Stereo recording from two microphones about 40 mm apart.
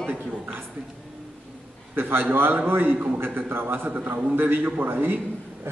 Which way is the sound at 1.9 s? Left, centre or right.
Right.